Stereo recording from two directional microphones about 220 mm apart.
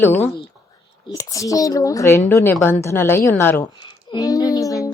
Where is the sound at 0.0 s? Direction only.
10° left (ahead or behind).